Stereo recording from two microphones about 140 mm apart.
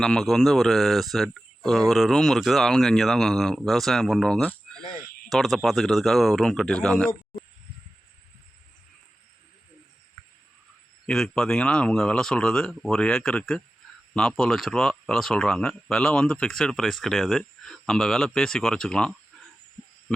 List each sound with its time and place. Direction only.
0.0 s speech: 5° left (ahead or behind)
4.9 s a sound: centre (ahead or behind)
5.6 s speech: centre (ahead or behind)
11.0 s speech: 5° left (ahead or behind)